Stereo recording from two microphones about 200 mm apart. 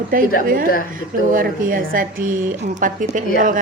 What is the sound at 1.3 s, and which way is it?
Speech, 45° right (ahead or behind).